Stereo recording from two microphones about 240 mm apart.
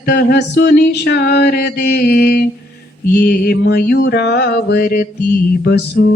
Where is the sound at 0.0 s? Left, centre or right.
Left.